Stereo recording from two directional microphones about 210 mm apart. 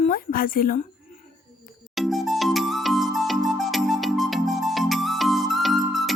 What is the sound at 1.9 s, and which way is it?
Music, centre (ahead or behind).